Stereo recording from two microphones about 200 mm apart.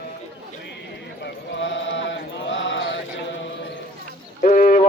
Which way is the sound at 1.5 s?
65° left (ahead or behind).